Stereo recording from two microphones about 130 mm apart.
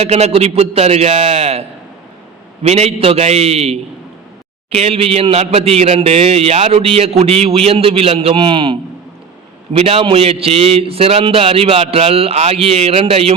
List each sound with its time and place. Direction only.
0.0 s a man's voice: 55° right (ahead or behind)
2.6 s a man's voice: 55° right (ahead or behind); by 8.8 s 40° right (ahead or behind)
9.7 s a man's voice: 50° right (ahead or behind)